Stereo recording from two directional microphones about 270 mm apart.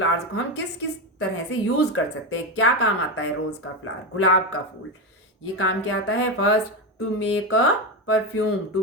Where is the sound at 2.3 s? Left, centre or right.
Left.